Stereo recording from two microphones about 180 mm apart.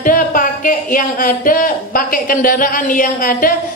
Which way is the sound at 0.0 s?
50° left (ahead or behind).